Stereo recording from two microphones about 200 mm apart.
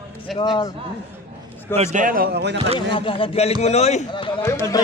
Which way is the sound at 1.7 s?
35° right (ahead or behind).